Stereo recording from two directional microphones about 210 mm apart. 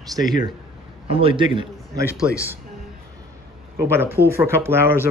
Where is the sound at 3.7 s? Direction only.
10° right (ahead or behind).